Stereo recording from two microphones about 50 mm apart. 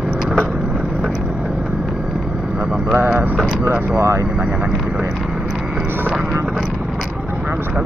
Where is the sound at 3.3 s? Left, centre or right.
Right.